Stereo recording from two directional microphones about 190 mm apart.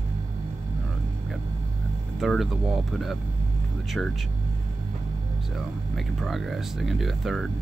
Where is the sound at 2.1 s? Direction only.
Centre (ahead or behind).